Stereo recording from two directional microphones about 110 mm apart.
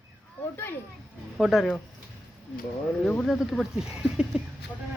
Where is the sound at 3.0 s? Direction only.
10° left (ahead or behind).